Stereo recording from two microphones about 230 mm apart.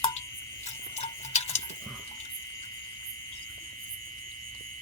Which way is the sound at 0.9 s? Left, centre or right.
Left.